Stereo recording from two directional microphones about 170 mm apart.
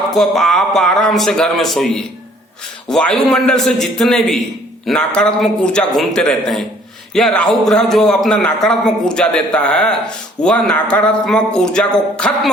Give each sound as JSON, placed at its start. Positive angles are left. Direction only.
{"t": 0.1, "sound": "a man's voice", "side_deg": 0}